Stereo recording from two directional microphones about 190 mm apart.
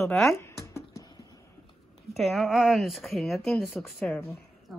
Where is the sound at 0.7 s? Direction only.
20° left (ahead or behind).